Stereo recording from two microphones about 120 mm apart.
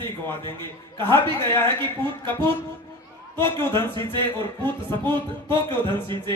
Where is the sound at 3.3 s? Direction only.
20° left (ahead or behind).